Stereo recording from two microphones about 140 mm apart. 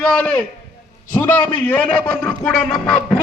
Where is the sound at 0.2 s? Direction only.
10° left (ahead or behind).